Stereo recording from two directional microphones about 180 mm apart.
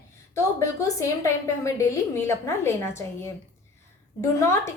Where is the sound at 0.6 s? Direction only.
15° left (ahead or behind).